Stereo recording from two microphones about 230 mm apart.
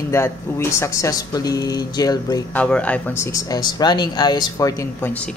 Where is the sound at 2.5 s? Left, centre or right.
Centre.